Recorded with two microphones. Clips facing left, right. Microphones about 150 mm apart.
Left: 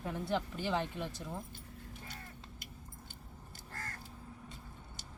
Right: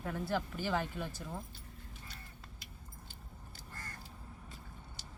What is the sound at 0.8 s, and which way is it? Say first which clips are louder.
Speech: left 1 dB; centre (ahead or behind).